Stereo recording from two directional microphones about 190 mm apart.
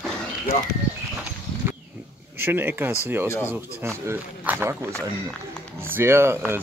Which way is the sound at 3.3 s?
15° left (ahead or behind).